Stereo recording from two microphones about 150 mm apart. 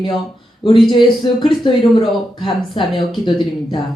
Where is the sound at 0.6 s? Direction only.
35° left (ahead or behind).